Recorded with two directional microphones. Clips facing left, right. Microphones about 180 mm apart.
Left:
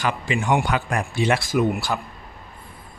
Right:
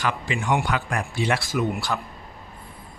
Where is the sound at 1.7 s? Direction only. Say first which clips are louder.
Left 2 dB; 5° left (ahead or behind).